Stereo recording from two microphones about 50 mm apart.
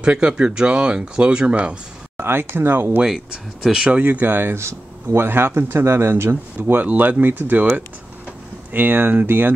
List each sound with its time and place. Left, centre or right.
0.0 s speech: right
2.1 s speech: right
3.1 s speech: centre
3.9 s speech: right
4.6 s speech: right
6.6 s speech: right